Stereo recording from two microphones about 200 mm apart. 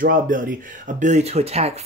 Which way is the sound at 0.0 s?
45° right (ahead or behind).